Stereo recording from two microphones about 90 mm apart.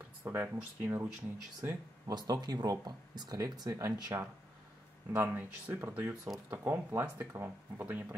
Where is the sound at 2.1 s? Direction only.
50° right (ahead or behind).